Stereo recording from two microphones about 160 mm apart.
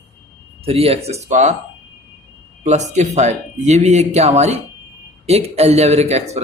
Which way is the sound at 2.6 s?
45° right (ahead or behind).